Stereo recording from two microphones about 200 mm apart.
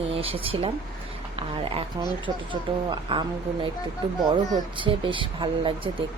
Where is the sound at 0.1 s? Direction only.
30° right (ahead or behind).